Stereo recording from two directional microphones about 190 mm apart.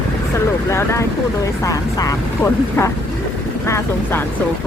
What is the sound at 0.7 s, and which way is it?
Speech, 15° left (ahead or behind).